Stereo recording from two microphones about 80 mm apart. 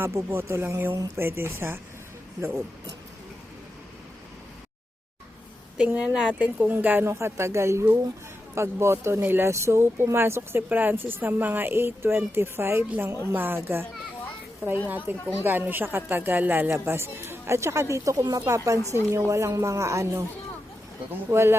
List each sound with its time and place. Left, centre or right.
0.0 s a woman's voice: right
5.7 s a woman's voice: centre
14.8 s a woman's voice: right
21.2 s a woman's voice: right